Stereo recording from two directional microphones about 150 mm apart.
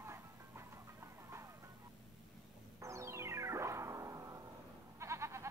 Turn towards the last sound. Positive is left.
turn(degrees=-20)  # may be behind; listen again after turning